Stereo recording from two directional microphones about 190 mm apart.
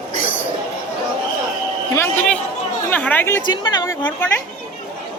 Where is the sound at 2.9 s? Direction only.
10° left (ahead or behind).